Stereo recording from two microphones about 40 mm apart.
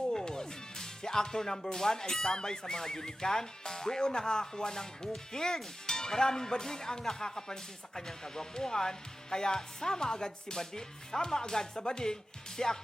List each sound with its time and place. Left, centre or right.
0.1 s speech: centre